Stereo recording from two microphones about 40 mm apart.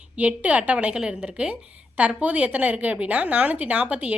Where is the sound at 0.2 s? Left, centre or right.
Right.